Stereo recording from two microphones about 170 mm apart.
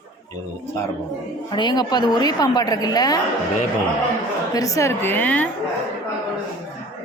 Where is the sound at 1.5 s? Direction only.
25° left (ahead or behind).